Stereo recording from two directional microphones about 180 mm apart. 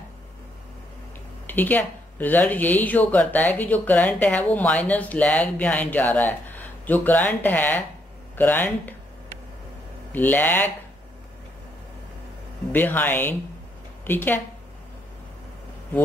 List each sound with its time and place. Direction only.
1.5 s speech: 10° left (ahead or behind)
10.1 s speech: 10° left (ahead or behind)
12.7 s speech: 10° left (ahead or behind)